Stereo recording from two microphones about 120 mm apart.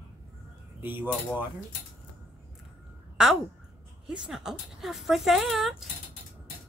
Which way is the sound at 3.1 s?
5° right (ahead or behind).